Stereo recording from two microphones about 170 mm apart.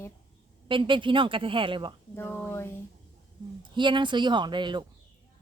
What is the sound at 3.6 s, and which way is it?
A woman's voice, 30° right (ahead or behind).